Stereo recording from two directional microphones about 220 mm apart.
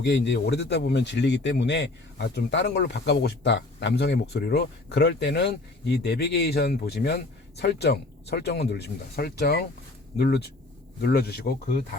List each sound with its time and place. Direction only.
0.0 s speech: 55° left (ahead or behind)